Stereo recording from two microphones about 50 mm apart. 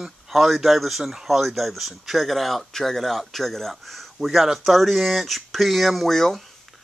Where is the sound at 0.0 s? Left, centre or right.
Centre.